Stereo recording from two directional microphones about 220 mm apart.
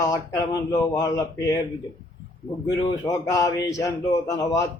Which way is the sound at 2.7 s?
15° left (ahead or behind).